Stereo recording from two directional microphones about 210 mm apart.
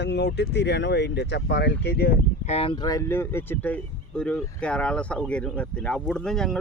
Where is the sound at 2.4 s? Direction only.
30° left (ahead or behind); by 6.5 s centre (ahead or behind).